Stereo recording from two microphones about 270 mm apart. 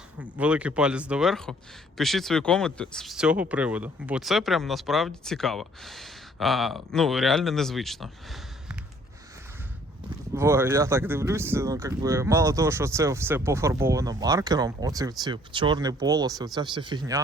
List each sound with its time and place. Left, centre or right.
0.2 s speech: centre
10.3 s speech: centre